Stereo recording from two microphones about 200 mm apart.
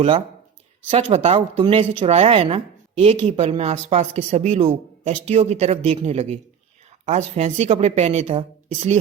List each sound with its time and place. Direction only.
0.9 s speech: 30° right (ahead or behind)